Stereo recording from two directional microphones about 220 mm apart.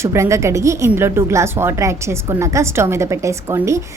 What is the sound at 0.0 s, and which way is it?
A woman's voice, 10° right (ahead or behind).